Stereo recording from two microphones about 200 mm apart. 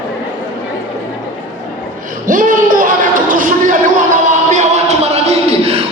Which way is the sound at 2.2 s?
40° right (ahead or behind).